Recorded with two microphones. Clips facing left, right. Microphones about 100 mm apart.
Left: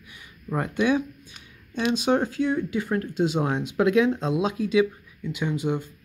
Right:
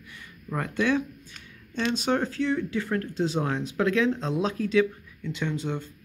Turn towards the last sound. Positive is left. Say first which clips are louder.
# left 4 dB
turn(degrees=15)  # may be behind; listen again after turning